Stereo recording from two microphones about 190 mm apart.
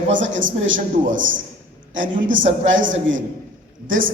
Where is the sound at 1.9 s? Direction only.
80° right.